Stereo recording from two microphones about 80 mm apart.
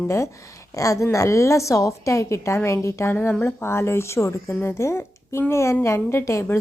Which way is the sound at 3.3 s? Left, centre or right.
Centre.